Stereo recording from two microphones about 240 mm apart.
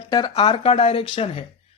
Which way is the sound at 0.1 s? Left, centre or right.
Centre.